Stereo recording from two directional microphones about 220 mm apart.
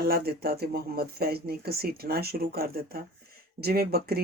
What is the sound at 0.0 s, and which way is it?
Speech, 45° right (ahead or behind).